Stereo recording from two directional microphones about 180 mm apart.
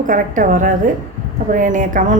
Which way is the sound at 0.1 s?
45° right (ahead or behind).